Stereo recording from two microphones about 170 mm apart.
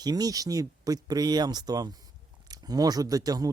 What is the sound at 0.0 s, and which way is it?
Speech, 20° right (ahead or behind).